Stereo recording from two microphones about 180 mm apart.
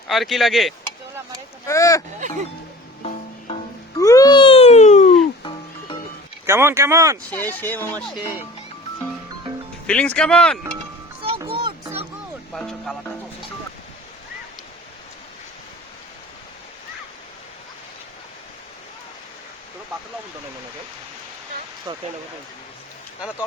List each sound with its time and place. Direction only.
0.1 s speech: centre (ahead or behind)
1.6 s speech: 15° left (ahead or behind)
3.0 s music: 35° left (ahead or behind)
3.9 s a sound: 20° left (ahead or behind); by 5.1 s 40° left (ahead or behind)
5.4 s music: 25° left (ahead or behind)
6.4 s speech: 15° right (ahead or behind)
7.3 s speech: 10° left (ahead or behind)
9.8 s speech: 5° left (ahead or behind)
11.2 s music: 30° right (ahead or behind)
12.5 s speech: centre (ahead or behind)
21.9 s speech: 25° right (ahead or behind)